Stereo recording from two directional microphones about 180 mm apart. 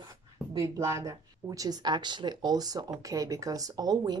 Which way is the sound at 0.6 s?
15° right (ahead or behind).